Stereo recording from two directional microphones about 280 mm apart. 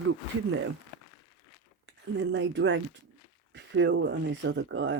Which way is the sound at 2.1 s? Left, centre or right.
Right.